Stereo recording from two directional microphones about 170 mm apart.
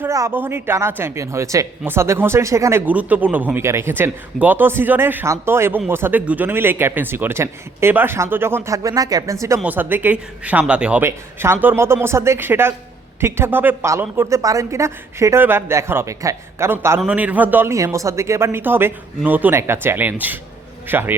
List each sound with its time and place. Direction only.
0.0 s a woman's voice: 15° right (ahead or behind)